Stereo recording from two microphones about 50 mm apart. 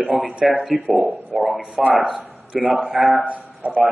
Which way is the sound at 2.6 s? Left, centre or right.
Centre.